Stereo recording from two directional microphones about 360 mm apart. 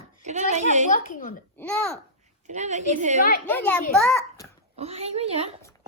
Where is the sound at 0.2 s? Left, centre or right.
Centre.